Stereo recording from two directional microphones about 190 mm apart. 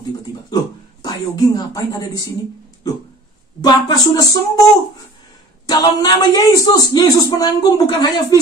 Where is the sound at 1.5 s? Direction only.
20° left (ahead or behind).